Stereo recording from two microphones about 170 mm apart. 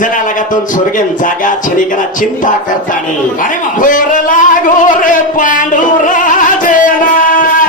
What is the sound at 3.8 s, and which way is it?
Speech, 50° left (ahead or behind).